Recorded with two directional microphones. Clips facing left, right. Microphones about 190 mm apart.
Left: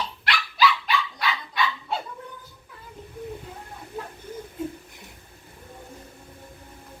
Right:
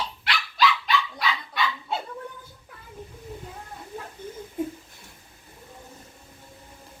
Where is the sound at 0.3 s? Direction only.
Centre (ahead or behind).